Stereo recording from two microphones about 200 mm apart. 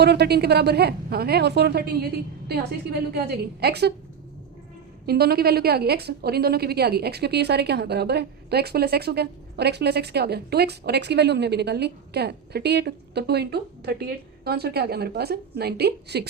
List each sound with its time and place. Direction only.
0.0 s a woman's voice: 55° right (ahead or behind)
5.0 s a woman's voice: 50° right (ahead or behind)